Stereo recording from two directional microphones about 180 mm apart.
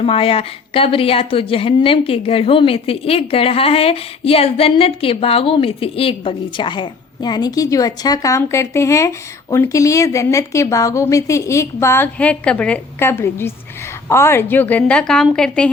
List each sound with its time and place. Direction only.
0.0 s a woman's voice: 30° left (ahead or behind); by 15.7 s 5° left (ahead or behind)